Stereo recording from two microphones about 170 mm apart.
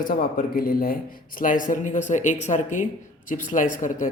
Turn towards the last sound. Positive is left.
turn(degrees=50)  # may be behind; listen again after turning